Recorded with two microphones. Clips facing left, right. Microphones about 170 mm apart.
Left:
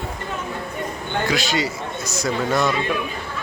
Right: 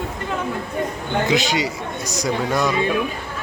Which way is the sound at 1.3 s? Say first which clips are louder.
Right 2 dB; 20° right (ahead or behind).